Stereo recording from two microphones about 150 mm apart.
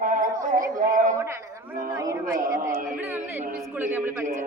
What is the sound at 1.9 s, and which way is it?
Speech, 25° right (ahead or behind).